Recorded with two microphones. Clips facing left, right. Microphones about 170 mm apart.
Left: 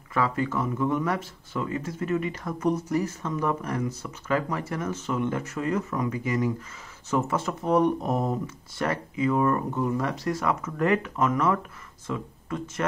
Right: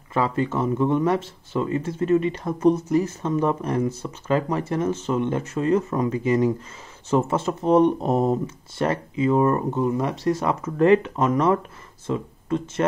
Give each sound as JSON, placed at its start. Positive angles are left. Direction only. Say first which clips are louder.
{"t": 0.1, "sound": "speech", "louder": "right 3 dB", "side_deg": -25}